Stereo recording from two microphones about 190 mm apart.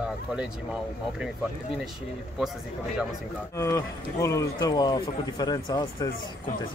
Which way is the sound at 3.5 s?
15° left (ahead or behind).